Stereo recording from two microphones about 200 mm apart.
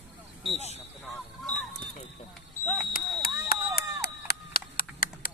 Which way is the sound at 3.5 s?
50° left (ahead or behind).